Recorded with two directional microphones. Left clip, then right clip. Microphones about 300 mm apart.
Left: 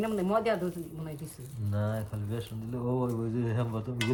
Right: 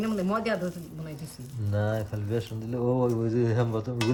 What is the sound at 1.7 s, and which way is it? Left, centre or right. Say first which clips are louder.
Speech: right 6 dB; right.